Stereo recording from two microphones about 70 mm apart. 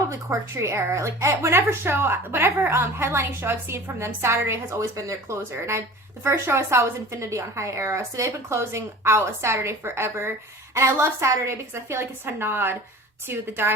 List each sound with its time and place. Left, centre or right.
0.1 s a woman's voice: right